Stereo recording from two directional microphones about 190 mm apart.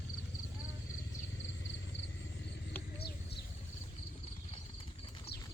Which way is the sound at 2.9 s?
55° left (ahead or behind).